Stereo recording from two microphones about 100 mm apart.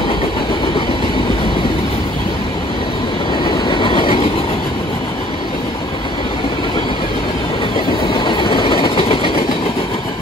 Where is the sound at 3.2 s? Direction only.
50° left (ahead or behind); by 4.4 s 65° left (ahead or behind).